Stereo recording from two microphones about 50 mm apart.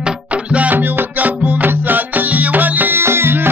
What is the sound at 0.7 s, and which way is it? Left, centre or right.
Music, right.